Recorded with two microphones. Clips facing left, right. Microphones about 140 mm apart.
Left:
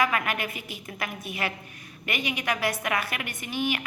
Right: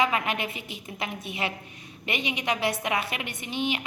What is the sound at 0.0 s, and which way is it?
A woman's voice, 20° right (ahead or behind).